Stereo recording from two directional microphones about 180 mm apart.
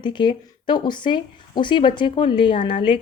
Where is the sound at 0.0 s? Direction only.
25° left (ahead or behind).